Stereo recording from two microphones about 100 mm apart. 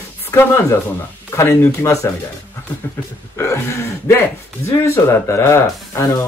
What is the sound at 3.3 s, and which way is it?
Speech, 25° left (ahead or behind).